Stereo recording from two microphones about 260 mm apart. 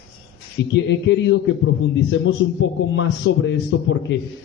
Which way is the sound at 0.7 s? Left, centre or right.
Left.